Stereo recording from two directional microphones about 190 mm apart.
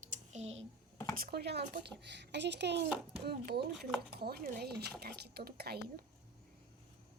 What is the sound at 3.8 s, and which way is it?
Speech, centre (ahead or behind).